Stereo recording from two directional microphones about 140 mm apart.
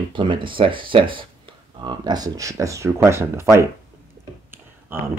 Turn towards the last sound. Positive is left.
turn(degrees=-15)  # may be behind; listen again after turning